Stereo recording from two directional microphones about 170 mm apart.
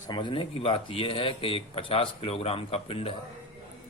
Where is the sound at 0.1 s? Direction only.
30° left (ahead or behind).